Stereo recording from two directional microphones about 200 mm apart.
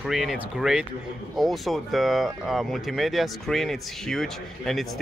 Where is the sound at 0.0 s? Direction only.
Centre (ahead or behind).